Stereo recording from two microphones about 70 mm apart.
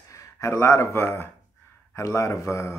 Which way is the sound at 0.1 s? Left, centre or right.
Left.